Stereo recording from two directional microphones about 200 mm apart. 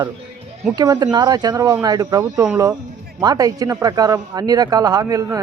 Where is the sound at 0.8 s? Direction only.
20° right (ahead or behind).